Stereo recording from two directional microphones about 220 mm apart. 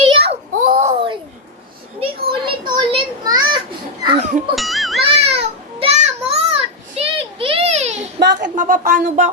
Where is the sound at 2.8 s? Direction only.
20° right (ahead or behind).